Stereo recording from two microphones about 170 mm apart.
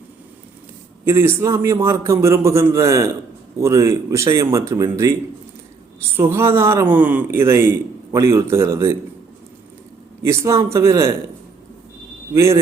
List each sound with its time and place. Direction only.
1.0 s a man's voice: 15° right (ahead or behind)
6.1 s a man's voice: 15° right (ahead or behind)
10.2 s a man's voice: 15° right (ahead or behind)
12.3 s a man's voice: 15° right (ahead or behind)